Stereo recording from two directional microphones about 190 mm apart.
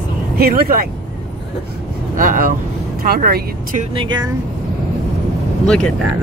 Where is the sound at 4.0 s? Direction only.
25° right (ahead or behind).